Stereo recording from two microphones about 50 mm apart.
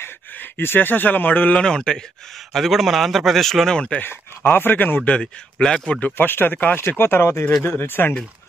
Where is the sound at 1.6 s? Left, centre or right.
Centre.